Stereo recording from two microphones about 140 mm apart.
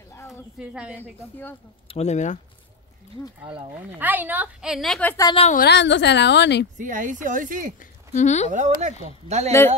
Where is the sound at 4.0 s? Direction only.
10° right (ahead or behind).